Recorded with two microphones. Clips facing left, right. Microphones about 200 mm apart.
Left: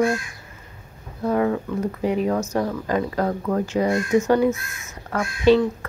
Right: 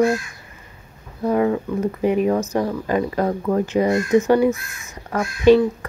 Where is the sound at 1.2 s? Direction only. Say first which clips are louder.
Right 2 dB; 15° right (ahead or behind).